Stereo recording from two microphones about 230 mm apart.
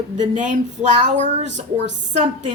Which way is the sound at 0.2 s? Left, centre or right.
Right.